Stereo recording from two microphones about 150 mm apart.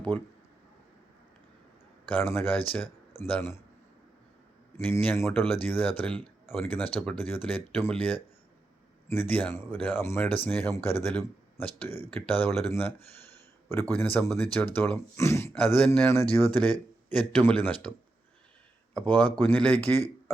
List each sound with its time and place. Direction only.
2.0 s a man's voice: 10° left (ahead or behind)
4.8 s speech: 15° left (ahead or behind)
13.3 s a sound: 15° left (ahead or behind)
13.9 s speech: 10° left (ahead or behind)
18.9 s speech: 10° left (ahead or behind)